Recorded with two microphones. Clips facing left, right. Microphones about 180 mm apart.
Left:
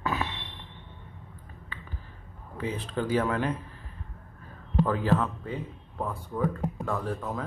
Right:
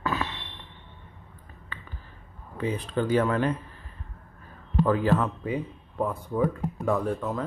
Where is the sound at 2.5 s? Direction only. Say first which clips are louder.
Right 3 dB; centre (ahead or behind).